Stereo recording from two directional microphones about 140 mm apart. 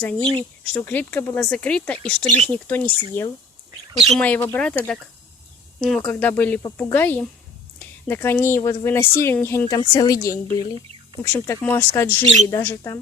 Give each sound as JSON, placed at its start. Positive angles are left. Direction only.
{"t": 0.0, "sound": "speech", "side_deg": 10}
{"t": 4.1, "sound": "speech", "side_deg": 10}
{"t": 9.7, "sound": "speech", "side_deg": 30}